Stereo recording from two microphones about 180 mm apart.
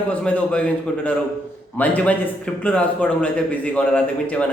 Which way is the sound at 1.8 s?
10° left (ahead or behind).